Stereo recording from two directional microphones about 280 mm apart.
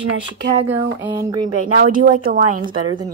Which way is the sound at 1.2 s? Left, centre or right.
Centre.